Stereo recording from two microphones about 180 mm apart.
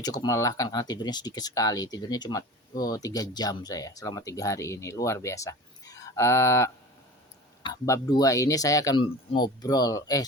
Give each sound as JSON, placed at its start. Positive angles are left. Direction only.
{"t": 0.0, "sound": "speech", "side_deg": 20}